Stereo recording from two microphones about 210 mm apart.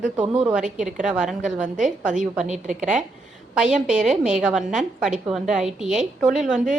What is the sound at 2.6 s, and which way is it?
Speech, 35° right (ahead or behind).